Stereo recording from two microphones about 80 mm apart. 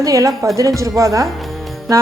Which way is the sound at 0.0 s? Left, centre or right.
Right.